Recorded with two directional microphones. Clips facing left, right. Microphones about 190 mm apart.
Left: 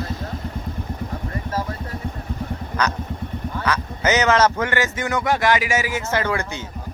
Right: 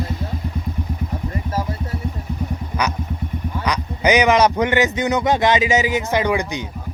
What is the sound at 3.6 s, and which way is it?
Speech, 15° right (ahead or behind).